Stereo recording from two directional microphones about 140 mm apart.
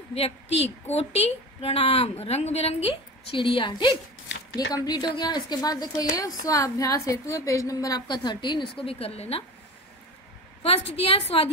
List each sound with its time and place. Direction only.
0.1 s a woman's voice: 45° left (ahead or behind)
10.6 s a woman's voice: 45° left (ahead or behind)